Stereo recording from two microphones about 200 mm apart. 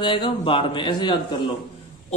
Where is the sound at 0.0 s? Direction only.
25° left (ahead or behind).